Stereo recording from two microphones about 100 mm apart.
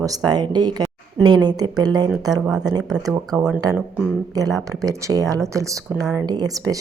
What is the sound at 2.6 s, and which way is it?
Speech, 40° right (ahead or behind).